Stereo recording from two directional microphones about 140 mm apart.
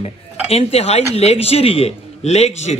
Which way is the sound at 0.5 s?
45° left (ahead or behind).